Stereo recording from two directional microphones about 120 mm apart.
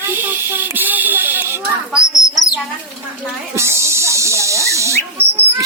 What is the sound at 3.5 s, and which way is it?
Rodents, 20° right (ahead or behind).